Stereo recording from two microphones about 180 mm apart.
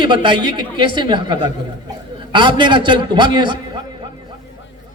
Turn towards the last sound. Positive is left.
turn(degrees=-25)  # may be behind; listen again after turning